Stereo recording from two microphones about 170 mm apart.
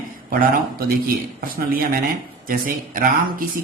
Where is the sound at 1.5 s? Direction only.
60° right (ahead or behind).